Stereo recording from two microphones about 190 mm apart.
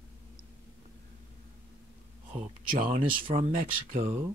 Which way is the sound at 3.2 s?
35° right (ahead or behind).